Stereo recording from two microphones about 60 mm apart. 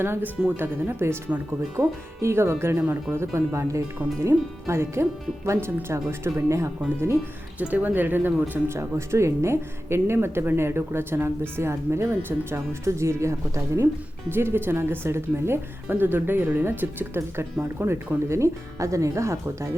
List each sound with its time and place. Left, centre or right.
0.0 s speech: right
7.6 s speech: right
14.3 s speech: right